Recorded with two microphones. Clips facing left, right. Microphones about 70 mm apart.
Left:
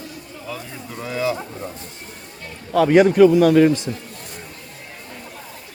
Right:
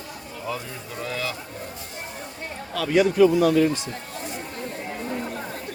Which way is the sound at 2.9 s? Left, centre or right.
Left.